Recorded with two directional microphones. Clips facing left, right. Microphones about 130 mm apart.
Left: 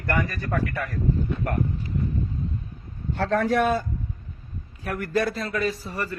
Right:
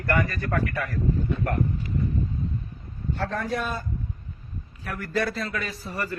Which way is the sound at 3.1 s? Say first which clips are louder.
Left 7 dB; 75° left (ahead or behind).